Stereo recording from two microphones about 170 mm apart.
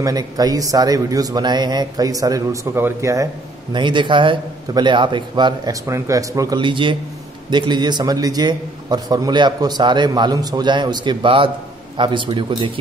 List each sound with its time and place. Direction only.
0.0 s a man's voice: 20° right (ahead or behind)